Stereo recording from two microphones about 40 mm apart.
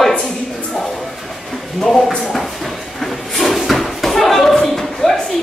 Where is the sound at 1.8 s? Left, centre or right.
Centre.